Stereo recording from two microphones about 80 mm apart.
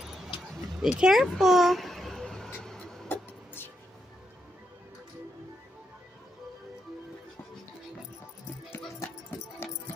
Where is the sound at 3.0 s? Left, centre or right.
Left.